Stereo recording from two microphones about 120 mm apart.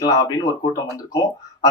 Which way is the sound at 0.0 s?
30° left (ahead or behind).